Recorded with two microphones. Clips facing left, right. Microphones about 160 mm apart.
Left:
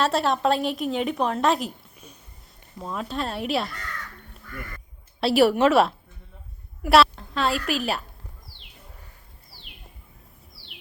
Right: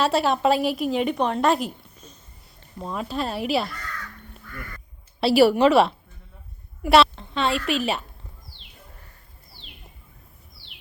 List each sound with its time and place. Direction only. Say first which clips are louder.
0.0 s a woman's voice: right 2 dB; centre (ahead or behind)
2.0 s a sound: even; 10° left (ahead or behind)
2.7 s a woman's voice: right 1 dB; centre (ahead or behind)
5.2 s a woman's voice: right 2 dB; centre (ahead or behind)